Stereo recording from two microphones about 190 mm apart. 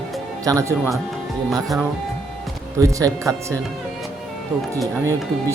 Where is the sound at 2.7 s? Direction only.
15° right (ahead or behind).